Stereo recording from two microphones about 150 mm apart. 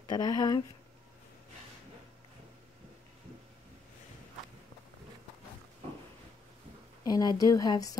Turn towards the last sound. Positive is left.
turn(degrees=25)  # may be behind; listen again after turning